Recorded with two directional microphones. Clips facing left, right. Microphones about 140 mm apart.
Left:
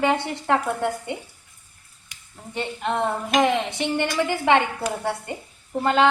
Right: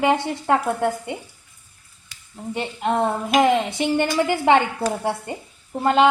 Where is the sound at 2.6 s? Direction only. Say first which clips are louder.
Right 3 dB; 15° right (ahead or behind).